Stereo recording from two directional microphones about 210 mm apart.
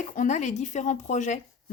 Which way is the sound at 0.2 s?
35° left (ahead or behind).